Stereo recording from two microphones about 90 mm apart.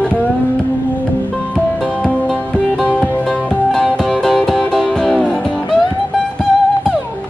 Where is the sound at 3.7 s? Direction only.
Centre (ahead or behind).